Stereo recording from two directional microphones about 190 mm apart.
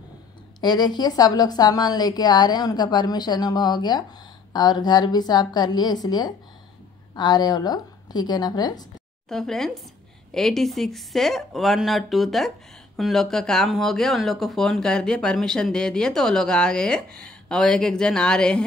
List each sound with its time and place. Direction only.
0.6 s a woman's voice: 20° left (ahead or behind)
9.3 s speech: centre (ahead or behind)